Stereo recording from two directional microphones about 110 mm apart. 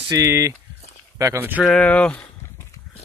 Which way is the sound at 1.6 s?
10° left (ahead or behind).